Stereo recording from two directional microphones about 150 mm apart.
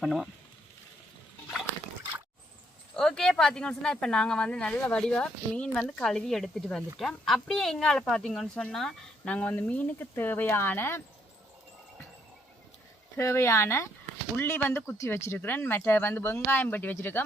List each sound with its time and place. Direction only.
0.0 s speech: centre (ahead or behind)
2.9 s speech: 5° left (ahead or behind)
13.1 s speech: 20° left (ahead or behind)